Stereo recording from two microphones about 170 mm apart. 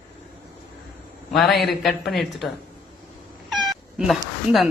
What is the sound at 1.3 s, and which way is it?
A woman's voice, centre (ahead or behind).